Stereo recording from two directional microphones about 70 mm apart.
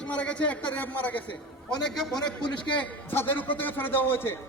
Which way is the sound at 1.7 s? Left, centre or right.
Centre.